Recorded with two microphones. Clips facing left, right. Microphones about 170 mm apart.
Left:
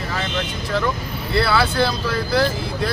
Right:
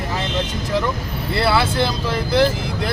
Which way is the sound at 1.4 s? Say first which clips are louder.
Even; 20° right (ahead or behind).